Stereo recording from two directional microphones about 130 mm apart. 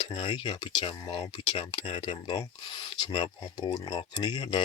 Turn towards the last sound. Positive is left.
turn(degrees=35)  # may be behind; listen again after turning